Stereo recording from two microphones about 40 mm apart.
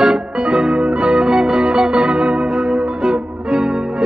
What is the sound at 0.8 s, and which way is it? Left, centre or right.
Music, right.